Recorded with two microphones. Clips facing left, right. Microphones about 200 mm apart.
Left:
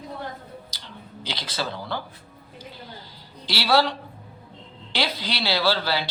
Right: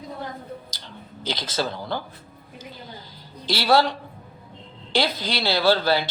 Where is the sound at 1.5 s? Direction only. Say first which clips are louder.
Right 2 dB; 45° right (ahead or behind).